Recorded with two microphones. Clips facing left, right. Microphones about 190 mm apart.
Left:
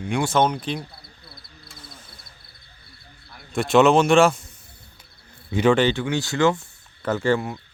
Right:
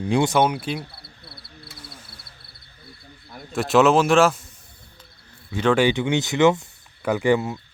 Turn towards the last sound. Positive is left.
turn(degrees=-15)  # may be behind; listen again after turning